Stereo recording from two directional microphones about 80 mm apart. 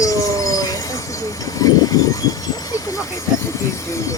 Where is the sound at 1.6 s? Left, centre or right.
Left.